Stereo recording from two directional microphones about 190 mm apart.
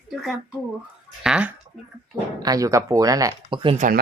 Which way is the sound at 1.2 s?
5° right (ahead or behind).